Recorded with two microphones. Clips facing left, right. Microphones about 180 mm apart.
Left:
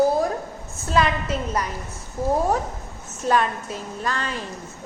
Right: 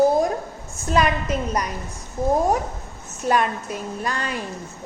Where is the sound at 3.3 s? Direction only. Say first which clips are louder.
Even; 15° right (ahead or behind).